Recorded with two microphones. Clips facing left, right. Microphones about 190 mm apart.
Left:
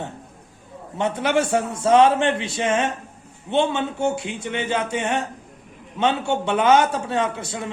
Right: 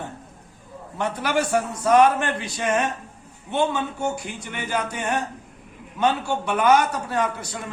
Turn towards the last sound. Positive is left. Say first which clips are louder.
# left 2 dB
turn(degrees=25)  # may be behind; listen again after turning